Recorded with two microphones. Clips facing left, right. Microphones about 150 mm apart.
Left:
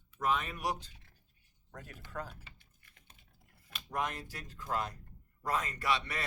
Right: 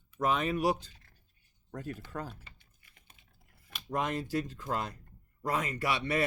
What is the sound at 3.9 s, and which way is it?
Speech, 25° right (ahead or behind).